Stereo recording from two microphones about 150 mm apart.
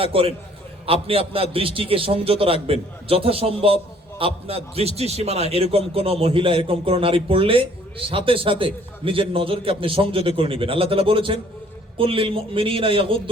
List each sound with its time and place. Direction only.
0.0 s a man's voice: 40° right (ahead or behind)